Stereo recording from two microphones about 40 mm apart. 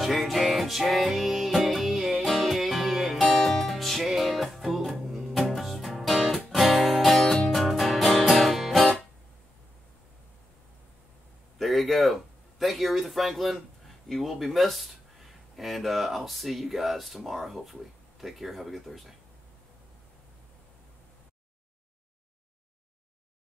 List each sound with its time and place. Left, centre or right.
0.0 s music: centre
11.5 s a sound: centre
14.3 s speech: centre